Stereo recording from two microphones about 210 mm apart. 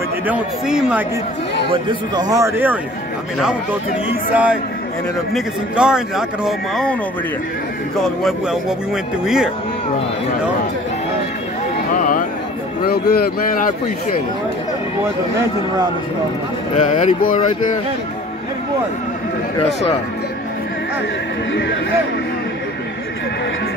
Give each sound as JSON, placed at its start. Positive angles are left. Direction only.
{"t": 0.3, "sound": "speech", "side_deg": -5}
{"t": 1.7, "sound": "a man's voice", "side_deg": -20}
{"t": 4.3, "sound": "a man's voice", "side_deg": -5}
{"t": 8.0, "sound": "speech", "side_deg": 0}
{"t": 11.9, "sound": "music", "side_deg": 40}
{"t": 12.8, "sound": "speech", "side_deg": 45}
{"t": 16.7, "sound": "speech", "side_deg": 35}
{"t": 19.6, "sound": "speech", "side_deg": 30}